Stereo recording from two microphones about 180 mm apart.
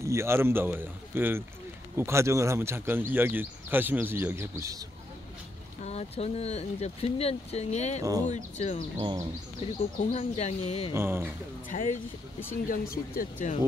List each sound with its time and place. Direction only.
0.0 s speech: 15° right (ahead or behind)
5.8 s speech: 35° left (ahead or behind)
9.0 s speech: 20° right (ahead or behind)
9.6 s speech: 30° left (ahead or behind)
10.9 s speech: 15° right (ahead or behind)
11.7 s speech: 45° left (ahead or behind)
12.6 s speech: 55° left (ahead or behind)